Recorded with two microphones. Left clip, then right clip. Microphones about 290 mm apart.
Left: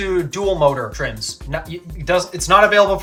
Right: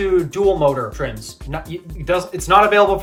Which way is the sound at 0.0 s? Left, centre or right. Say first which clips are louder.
Right 3 dB; centre.